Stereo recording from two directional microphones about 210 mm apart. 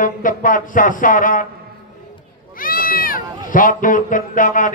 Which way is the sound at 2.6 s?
45° left (ahead or behind).